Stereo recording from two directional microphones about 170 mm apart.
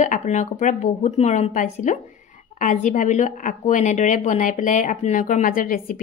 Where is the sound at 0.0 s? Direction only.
45° left (ahead or behind).